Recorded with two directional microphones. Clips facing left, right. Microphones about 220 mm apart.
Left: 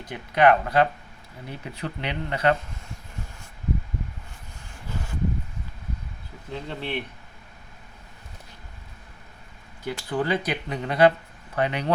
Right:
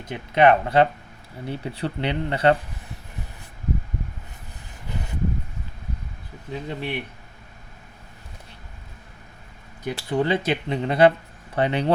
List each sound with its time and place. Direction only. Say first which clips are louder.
0.0 s speech: right 2 dB; 25° right (ahead or behind)
4.9 s a sound: right 1 dB; 20° right (ahead or behind)
6.5 s speech: right 2 dB; 15° right (ahead or behind)
9.8 s speech: right 3 dB; 25° right (ahead or behind)